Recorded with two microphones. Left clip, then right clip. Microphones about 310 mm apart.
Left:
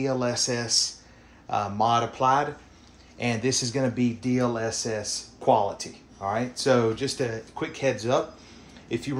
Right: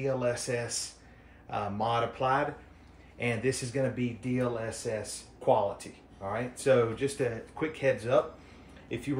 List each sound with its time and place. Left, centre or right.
0.0 s speech: centre